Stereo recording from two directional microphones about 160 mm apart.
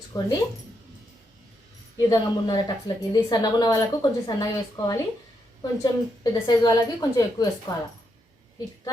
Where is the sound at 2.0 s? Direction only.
20° left (ahead or behind).